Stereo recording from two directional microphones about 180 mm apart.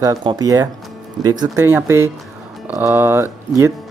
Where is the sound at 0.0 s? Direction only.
25° right (ahead or behind).